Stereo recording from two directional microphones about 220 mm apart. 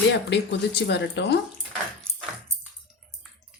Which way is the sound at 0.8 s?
50° left (ahead or behind).